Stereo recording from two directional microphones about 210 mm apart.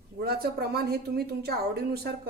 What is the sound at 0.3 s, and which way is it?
A woman's voice, 50° right (ahead or behind).